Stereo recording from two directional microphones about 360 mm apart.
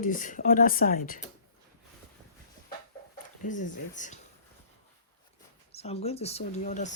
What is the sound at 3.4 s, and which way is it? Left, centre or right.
Speech, left.